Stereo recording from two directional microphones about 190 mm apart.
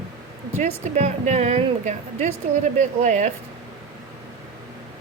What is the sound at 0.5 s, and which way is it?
Speech, 40° right (ahead or behind).